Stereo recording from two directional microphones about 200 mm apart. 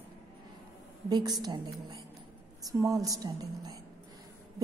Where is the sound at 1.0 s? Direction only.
20° right (ahead or behind).